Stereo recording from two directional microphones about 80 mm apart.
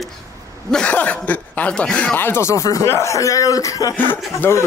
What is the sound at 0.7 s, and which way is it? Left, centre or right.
Speech, centre.